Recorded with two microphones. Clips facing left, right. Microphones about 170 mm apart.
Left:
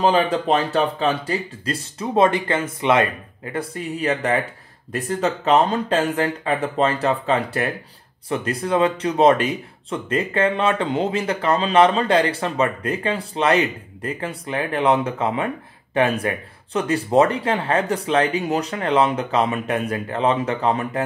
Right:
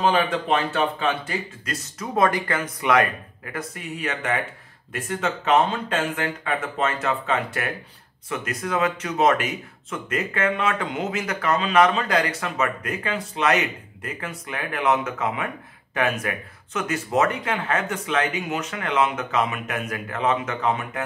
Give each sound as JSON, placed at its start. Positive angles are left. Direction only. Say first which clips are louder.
{"t": 0.0, "sound": "speech", "louder": "left 3 dB", "side_deg": 35}